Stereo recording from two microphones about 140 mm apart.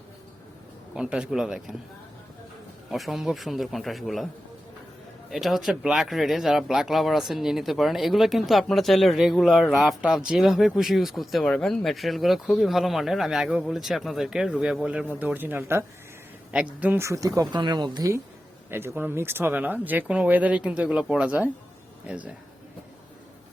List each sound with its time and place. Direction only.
0.9 s speech: 5° right (ahead or behind)
2.9 s speech: centre (ahead or behind)
5.3 s speech: centre (ahead or behind)
16.8 s a woman's voice: 15° right (ahead or behind)
18.7 s speech: 15° right (ahead or behind)